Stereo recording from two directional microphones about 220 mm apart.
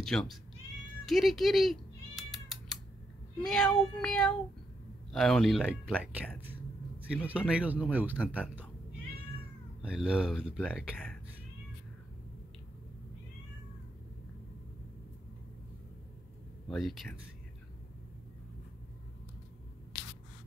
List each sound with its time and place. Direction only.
0.0 s speech: centre (ahead or behind)
1.0 s cat: centre (ahead or behind)
3.3 s speech: 5° left (ahead or behind)
7.2 s speech: 5° right (ahead or behind)
9.8 s speech: 5° right (ahead or behind)
16.6 s speech: centre (ahead or behind)